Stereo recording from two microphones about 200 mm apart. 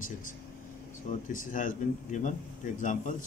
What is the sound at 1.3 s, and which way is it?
Speech, 40° left (ahead or behind).